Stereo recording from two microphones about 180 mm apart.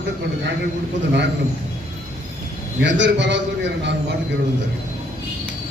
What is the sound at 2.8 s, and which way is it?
A man's voice, 85° right.